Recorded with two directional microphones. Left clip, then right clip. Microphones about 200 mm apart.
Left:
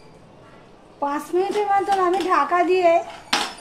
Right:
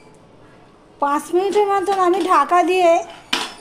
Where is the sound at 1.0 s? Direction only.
40° right (ahead or behind).